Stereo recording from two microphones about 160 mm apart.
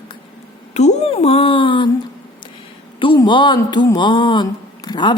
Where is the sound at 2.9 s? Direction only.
30° left (ahead or behind).